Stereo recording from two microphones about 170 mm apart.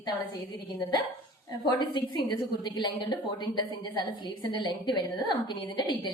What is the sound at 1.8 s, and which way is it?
A woman's voice, 25° left (ahead or behind).